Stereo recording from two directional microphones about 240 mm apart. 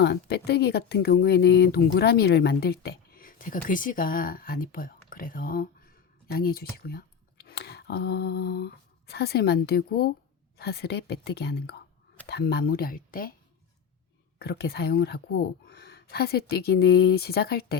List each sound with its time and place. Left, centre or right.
0.0 s a woman's voice: left
14.3 s speech: left